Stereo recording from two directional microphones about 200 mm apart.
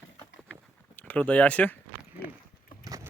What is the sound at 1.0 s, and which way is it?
Speech, 5° left (ahead or behind).